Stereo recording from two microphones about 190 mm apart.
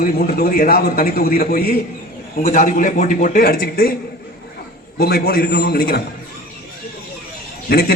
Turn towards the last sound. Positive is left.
turn(degrees=55)  # may be behind; listen again after turning